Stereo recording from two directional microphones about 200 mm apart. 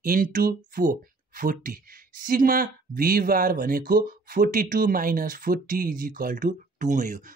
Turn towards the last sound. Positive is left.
turn(degrees=-40)  # may be behind; listen again after turning